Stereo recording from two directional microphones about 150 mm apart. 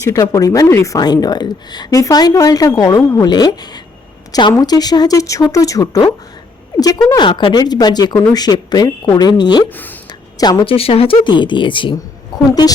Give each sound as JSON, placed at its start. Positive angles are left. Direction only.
{"t": 0.0, "sound": "a woman's voice", "side_deg": 20}
{"t": 7.1, "sound": "a woman's voice", "side_deg": 30}
{"t": 9.6, "sound": "speech", "side_deg": 10}
{"t": 10.3, "sound": "a woman's voice", "side_deg": 25}
{"t": 10.7, "sound": "a woman's voice", "side_deg": 40}